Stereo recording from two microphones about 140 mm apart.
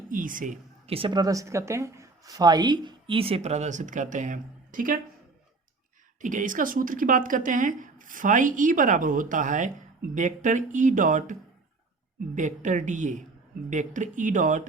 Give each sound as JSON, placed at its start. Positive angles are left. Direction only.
{"t": 0.1, "sound": "speech", "side_deg": -75}
{"t": 0.9, "sound": "a woman's voice", "side_deg": -40}
{"t": 6.2, "sound": "speech", "side_deg": -70}